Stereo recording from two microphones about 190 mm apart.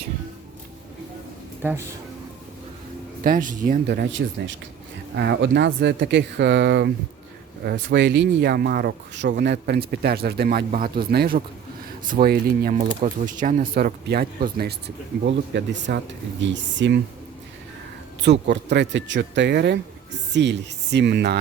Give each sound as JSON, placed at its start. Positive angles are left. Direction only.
{"t": 3.2, "sound": "speech", "side_deg": -45}
{"t": 3.8, "sound": "speech", "side_deg": -65}
{"t": 18.2, "sound": "speech", "side_deg": -65}